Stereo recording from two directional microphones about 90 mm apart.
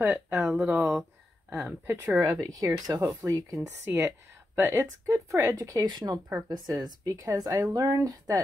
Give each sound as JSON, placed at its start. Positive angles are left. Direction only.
{"t": 0.0, "sound": "speech", "side_deg": -30}
{"t": 0.6, "sound": "speech", "side_deg": -20}
{"t": 1.9, "sound": "speech", "side_deg": -30}
{"t": 3.6, "sound": "speech", "side_deg": -25}